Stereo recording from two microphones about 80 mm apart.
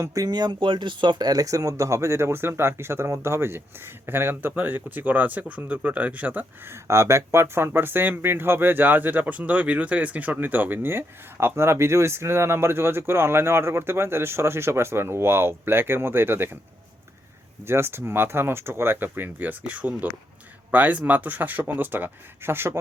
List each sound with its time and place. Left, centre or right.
0.1 s speech: right
6.8 s speech: right
17.7 s speech: right